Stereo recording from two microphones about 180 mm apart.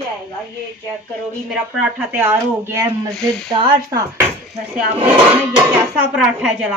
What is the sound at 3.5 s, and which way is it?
Speech, 25° right (ahead or behind).